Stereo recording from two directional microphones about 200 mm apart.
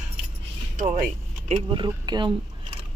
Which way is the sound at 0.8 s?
35° right (ahead or behind).